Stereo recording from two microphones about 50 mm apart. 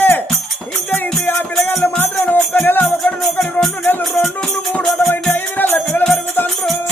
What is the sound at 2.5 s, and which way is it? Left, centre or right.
Music, left.